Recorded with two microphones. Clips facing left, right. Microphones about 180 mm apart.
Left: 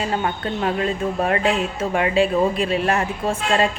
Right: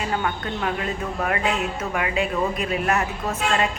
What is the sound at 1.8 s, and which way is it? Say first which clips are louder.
Speech: left 6 dB; 30° left (ahead or behind).